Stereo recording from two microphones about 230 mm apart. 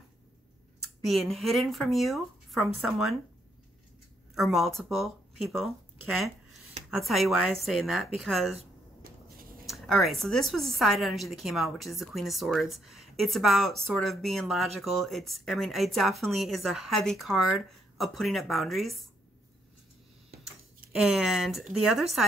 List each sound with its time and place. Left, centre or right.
1.0 s speech: centre
4.4 s speech: centre
9.0 s a sound: right
9.7 s speech: centre
20.9 s speech: centre